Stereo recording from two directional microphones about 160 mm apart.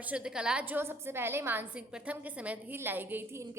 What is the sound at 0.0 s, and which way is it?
A woman's voice, 5° right (ahead or behind).